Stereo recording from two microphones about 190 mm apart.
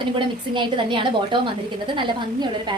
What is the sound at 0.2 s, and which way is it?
A woman's voice, 25° right (ahead or behind).